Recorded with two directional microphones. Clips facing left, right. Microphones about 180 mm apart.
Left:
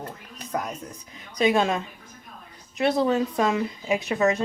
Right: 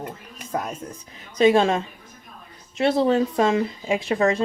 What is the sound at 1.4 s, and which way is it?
Speech, 30° right (ahead or behind).